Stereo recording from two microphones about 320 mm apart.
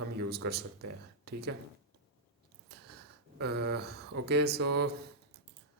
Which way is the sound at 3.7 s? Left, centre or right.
Right.